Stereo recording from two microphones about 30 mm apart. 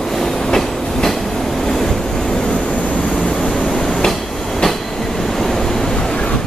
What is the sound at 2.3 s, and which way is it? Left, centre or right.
Waves, left.